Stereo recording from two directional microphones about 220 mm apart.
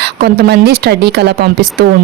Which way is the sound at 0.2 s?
50° right (ahead or behind).